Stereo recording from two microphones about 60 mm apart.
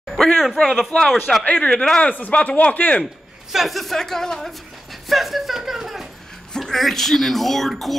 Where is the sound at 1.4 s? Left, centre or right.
Centre.